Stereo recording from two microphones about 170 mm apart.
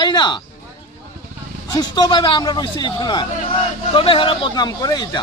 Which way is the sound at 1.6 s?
25° left (ahead or behind).